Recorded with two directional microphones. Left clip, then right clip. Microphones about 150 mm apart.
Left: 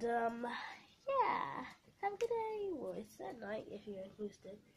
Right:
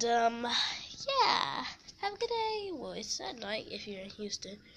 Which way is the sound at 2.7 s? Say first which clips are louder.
Right 6 dB; 10° right (ahead or behind).